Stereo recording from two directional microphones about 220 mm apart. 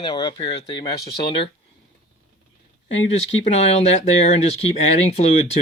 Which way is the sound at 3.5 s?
30° left (ahead or behind).